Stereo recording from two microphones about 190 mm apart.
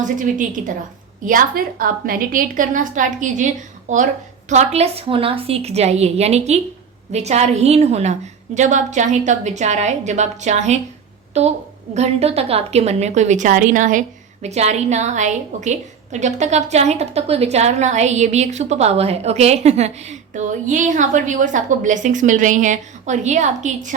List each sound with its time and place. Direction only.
0.0 s a woman's voice: 40° right (ahead or behind)